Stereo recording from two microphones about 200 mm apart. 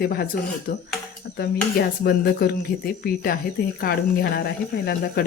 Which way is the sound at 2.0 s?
50° left (ahead or behind).